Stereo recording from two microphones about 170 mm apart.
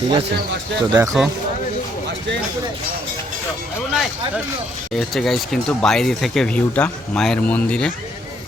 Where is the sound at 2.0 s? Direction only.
90° right.